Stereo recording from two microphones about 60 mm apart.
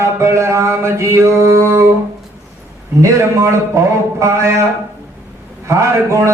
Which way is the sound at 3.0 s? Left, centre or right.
Right.